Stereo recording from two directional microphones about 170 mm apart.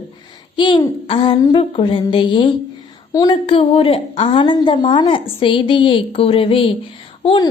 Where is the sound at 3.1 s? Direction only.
25° left (ahead or behind).